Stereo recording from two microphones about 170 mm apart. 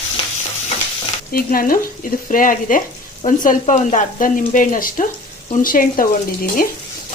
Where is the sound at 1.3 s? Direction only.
60° left (ahead or behind).